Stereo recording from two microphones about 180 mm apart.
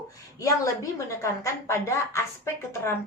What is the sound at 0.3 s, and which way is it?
A woman's voice, 20° left (ahead or behind).